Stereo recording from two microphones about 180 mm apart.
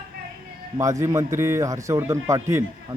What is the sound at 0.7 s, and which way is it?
Speech, 15° right (ahead or behind).